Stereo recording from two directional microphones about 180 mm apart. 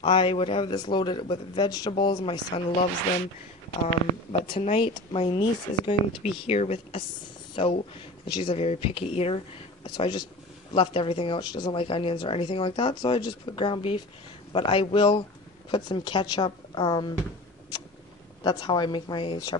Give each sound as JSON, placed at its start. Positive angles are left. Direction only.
{"t": 0.0, "sound": "speech", "side_deg": 30}
{"t": 4.3, "sound": "speech", "side_deg": 30}
{"t": 18.4, "sound": "speech", "side_deg": 20}